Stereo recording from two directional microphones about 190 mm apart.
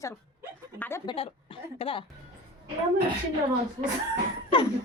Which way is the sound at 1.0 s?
25° left (ahead or behind).